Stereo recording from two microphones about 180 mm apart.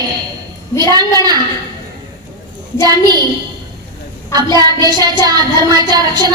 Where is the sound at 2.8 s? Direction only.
20° right (ahead or behind).